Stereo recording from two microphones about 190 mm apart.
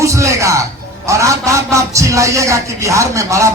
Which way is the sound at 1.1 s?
15° right (ahead or behind).